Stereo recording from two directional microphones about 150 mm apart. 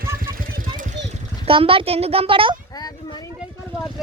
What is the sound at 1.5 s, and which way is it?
A child's voice, 35° right (ahead or behind).